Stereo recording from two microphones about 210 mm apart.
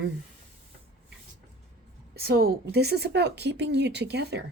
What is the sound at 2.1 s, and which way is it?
Speech, 45° right (ahead or behind).